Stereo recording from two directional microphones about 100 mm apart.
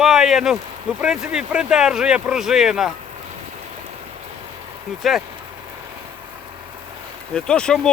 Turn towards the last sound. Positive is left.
turn(degrees=5)  # may be behind; listen again after turning